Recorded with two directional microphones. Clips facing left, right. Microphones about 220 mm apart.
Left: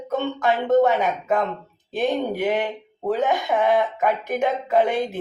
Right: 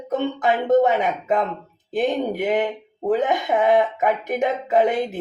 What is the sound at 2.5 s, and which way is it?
Speech, 20° right (ahead or behind).